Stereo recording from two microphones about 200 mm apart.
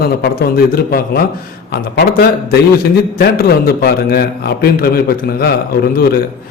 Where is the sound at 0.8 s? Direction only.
50° left (ahead or behind).